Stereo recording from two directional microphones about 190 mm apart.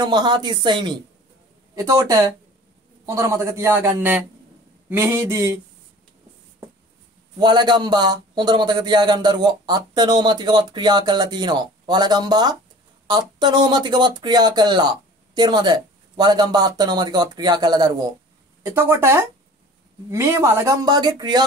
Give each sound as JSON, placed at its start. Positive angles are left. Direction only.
{"t": 0.0, "sound": "a man's voice", "side_deg": -20}
{"t": 7.3, "sound": "a man's voice", "side_deg": -20}